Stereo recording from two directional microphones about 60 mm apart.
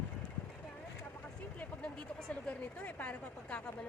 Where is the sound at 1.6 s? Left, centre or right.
Centre.